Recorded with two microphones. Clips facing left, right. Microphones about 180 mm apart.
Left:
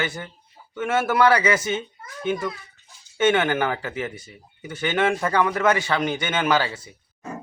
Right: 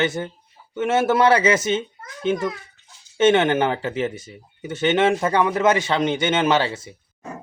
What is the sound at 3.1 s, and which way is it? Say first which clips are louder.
Speech: right 4 dB; 25° right (ahead or behind).